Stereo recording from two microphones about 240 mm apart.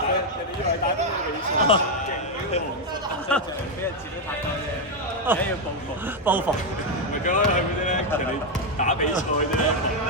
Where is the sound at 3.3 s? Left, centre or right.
Centre.